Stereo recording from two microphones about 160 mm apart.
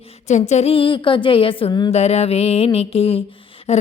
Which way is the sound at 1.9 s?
40° left (ahead or behind).